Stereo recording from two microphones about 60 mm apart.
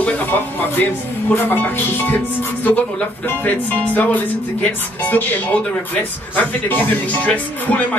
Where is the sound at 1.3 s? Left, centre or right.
Left.